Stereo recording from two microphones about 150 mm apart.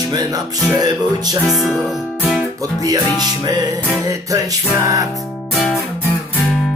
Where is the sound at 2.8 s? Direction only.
25° right (ahead or behind).